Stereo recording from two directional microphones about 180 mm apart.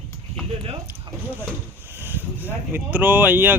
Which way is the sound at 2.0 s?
10° right (ahead or behind).